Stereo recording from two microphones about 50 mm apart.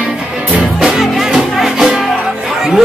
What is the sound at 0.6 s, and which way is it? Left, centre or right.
Music, centre.